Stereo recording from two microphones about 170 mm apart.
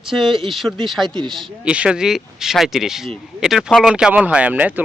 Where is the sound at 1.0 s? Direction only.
25° right (ahead or behind).